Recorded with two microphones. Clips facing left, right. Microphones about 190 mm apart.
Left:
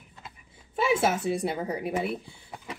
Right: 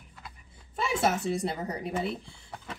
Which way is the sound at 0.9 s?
10° left (ahead or behind).